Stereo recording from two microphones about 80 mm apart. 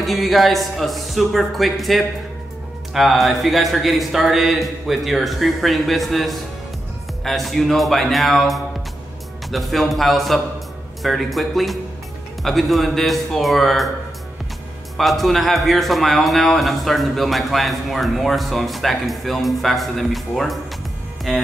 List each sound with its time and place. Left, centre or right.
0.0 s a man's voice: centre
15.0 s a man's voice: centre